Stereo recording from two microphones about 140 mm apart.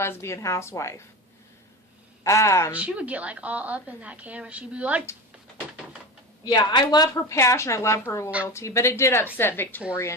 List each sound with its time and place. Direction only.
0.0 s speech: 20° left (ahead or behind)
2.2 s speech: 20° left (ahead or behind)
2.7 s a woman's voice: 10° right (ahead or behind)
6.4 s a woman's voice: 30° left (ahead or behind)